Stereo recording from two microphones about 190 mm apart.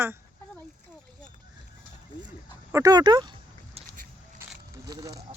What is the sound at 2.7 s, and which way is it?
Speech, 20° right (ahead or behind).